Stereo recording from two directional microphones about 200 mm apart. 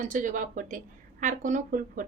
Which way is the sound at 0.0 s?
40° right (ahead or behind).